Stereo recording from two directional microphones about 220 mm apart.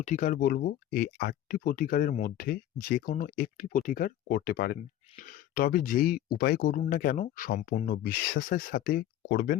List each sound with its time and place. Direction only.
0.0 s speech: 35° left (ahead or behind)